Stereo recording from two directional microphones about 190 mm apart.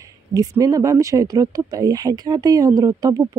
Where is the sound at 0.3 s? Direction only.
15° right (ahead or behind).